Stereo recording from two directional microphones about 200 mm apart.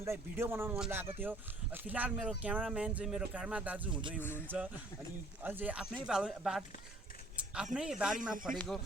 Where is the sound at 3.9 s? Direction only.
25° right (ahead or behind).